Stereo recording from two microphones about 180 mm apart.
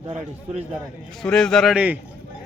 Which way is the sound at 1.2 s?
5° left (ahead or behind).